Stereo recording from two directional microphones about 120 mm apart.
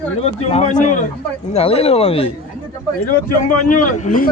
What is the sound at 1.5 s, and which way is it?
Speech, 55° left (ahead or behind).